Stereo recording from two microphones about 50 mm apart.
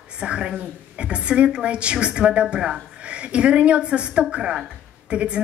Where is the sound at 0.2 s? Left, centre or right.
Right.